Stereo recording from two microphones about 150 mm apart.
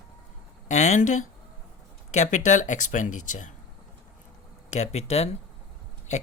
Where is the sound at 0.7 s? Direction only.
50° left (ahead or behind).